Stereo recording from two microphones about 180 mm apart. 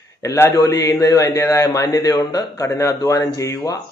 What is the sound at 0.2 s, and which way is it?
A man's voice, 15° left (ahead or behind).